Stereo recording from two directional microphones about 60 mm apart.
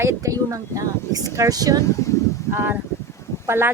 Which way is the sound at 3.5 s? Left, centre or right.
Right.